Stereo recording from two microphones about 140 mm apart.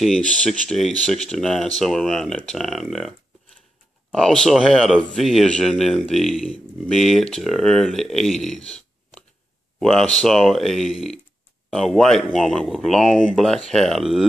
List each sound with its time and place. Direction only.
0.0 s speech: 5° left (ahead or behind)